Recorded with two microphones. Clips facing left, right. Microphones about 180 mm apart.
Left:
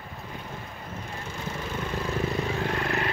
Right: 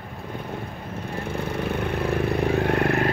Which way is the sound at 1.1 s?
60° right (ahead or behind).